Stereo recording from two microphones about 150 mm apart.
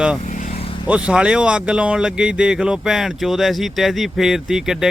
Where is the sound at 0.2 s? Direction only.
55° left (ahead or behind).